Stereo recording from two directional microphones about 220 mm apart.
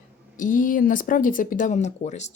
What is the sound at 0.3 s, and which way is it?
Speech, 35° left (ahead or behind).